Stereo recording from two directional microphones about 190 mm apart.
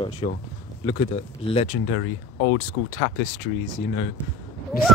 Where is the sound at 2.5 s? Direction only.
90° left.